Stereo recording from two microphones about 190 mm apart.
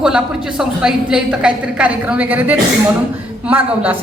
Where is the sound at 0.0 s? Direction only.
5° right (ahead or behind).